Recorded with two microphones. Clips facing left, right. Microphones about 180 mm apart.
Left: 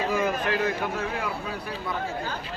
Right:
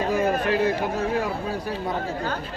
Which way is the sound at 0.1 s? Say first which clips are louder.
Right 4 dB; 35° right (ahead or behind).